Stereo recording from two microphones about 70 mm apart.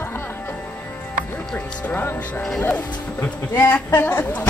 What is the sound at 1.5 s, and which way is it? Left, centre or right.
Speech, centre.